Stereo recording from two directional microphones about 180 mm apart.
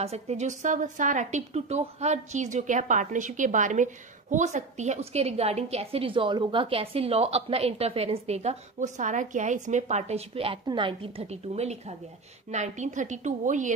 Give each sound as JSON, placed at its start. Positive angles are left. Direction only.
{"t": 0.0, "sound": "a woman's voice", "side_deg": -35}